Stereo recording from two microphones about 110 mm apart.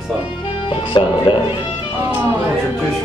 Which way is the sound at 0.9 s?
45° left (ahead or behind).